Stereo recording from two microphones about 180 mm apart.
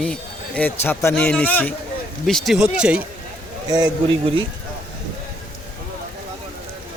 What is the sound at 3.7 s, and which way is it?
Speech, 20° right (ahead or behind).